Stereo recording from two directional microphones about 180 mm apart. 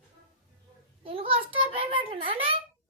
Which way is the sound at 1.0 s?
30° right (ahead or behind).